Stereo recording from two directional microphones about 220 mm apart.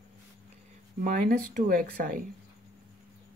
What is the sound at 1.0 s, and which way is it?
Speech, 40° right (ahead or behind).